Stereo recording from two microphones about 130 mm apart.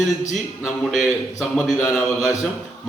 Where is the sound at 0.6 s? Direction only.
Centre (ahead or behind).